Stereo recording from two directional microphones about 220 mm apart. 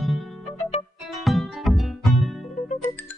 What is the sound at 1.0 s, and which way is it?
Music, centre (ahead or behind).